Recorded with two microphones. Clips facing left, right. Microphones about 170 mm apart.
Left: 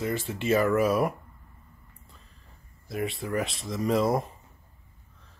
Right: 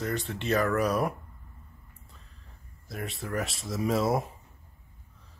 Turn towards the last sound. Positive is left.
turn(degrees=-5)  # may be behind; listen again after turning